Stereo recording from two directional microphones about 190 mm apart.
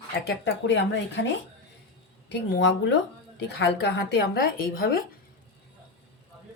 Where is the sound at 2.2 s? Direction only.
65° left (ahead or behind).